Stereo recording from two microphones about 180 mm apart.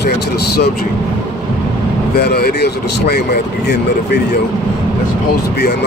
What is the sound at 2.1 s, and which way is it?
Speech, 60° left (ahead or behind).